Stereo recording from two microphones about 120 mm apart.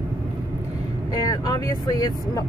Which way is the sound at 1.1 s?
30° left (ahead or behind).